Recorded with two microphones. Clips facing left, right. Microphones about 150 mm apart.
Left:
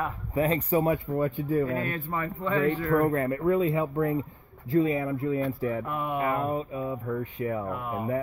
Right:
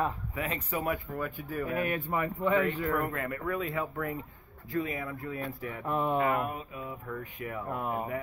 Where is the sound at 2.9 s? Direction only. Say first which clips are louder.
Left 8 dB; 30° left (ahead or behind).